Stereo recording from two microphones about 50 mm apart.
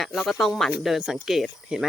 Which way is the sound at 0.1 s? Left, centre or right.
Centre.